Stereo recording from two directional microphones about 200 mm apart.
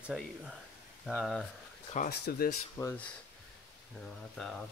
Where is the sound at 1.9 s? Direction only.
55° left (ahead or behind).